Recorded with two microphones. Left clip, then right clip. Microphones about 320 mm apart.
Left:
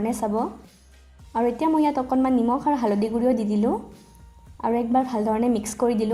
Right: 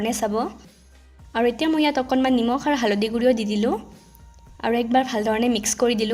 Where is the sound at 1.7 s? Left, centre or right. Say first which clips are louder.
Right 1 dB; right.